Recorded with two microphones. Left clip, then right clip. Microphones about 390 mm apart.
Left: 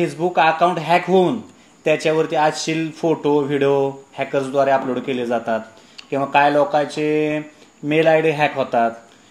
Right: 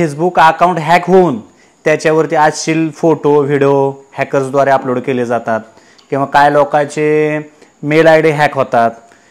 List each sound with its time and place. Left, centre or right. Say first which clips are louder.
0.0 s speech: right 8 dB; right